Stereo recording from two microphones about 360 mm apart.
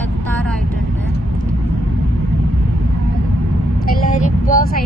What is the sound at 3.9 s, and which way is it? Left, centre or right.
Speech, left.